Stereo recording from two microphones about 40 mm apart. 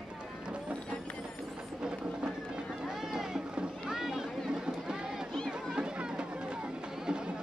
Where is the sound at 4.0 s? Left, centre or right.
Centre.